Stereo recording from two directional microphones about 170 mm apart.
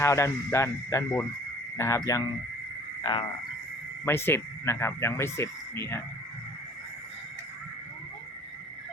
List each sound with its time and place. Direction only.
0.0 s speech: 15° left (ahead or behind)
4.0 s speech: 15° left (ahead or behind)